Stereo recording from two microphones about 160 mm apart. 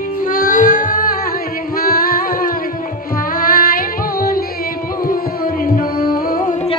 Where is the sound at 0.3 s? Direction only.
60° left (ahead or behind).